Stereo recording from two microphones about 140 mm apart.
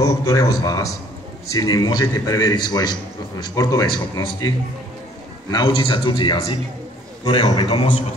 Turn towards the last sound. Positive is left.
turn(degrees=30)  # may be behind; listen again after turning